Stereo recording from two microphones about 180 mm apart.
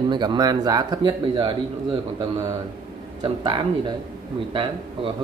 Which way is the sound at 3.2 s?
25° right (ahead or behind).